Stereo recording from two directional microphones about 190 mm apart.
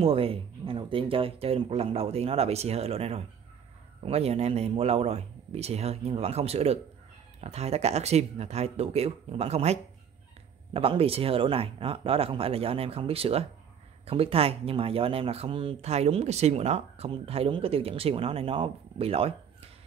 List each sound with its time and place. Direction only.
0.0 s speech: 30° right (ahead or behind)